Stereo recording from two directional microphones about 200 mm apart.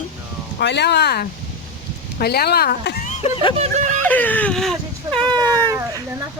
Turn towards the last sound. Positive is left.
turn(degrees=-15)  # may be behind; listen again after turning